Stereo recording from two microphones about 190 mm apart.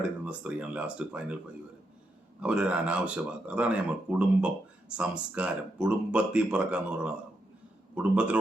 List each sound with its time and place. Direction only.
0.0 s speech: 5° right (ahead or behind)
2.4 s speech: 5° right (ahead or behind)